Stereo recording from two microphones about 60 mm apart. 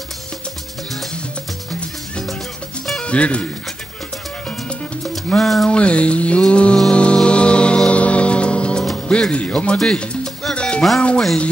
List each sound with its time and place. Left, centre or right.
3.0 s speech: centre
5.4 s music: centre
5.7 s a sound: centre
6.4 s music: centre
9.8 s music: centre
11.0 s a sound: centre